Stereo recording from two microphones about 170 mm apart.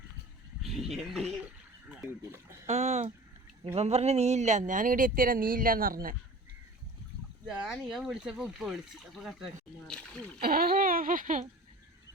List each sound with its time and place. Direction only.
0.6 s speech: centre (ahead or behind)
2.0 s speech: 15° right (ahead or behind)
2.6 s speech: 40° right (ahead or behind); by 6.1 s 55° right (ahead or behind)
7.4 s speech: 5° right (ahead or behind)
10.4 s speech: 60° right (ahead or behind)